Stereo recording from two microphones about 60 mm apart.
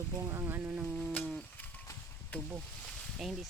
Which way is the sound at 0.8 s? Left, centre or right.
Centre.